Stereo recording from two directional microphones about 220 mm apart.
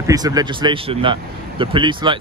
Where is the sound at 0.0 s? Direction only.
15° right (ahead or behind).